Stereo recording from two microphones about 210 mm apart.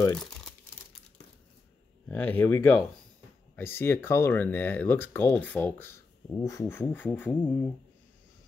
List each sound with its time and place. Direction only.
0.0 s speech: 20° left (ahead or behind)
2.0 s speech: 10° left (ahead or behind)